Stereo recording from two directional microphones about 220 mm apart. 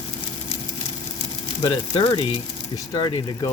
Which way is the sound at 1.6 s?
20° left (ahead or behind).